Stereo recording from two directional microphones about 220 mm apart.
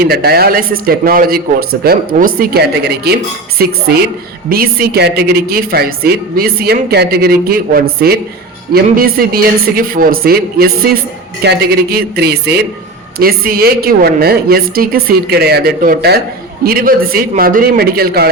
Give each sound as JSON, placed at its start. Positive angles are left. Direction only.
{"t": 0.0, "sound": "a woman's voice", "side_deg": -45}